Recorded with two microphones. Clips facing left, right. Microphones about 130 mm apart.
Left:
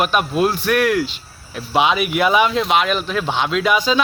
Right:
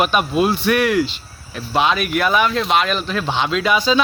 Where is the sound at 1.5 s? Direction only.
15° left (ahead or behind).